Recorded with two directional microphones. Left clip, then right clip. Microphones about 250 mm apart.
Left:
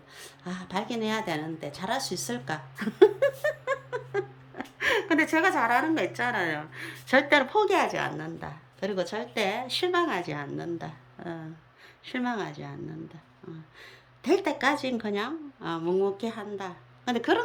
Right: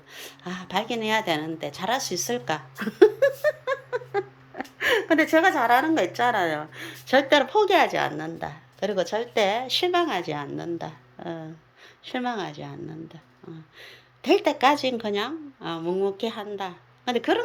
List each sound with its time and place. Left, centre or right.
0.1 s a sound: centre
5.7 s a woman's voice: centre
7.6 s a woman's voice: centre
13.8 s a woman's voice: centre